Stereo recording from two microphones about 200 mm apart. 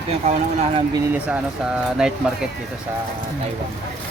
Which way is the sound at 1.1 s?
5° right (ahead or behind).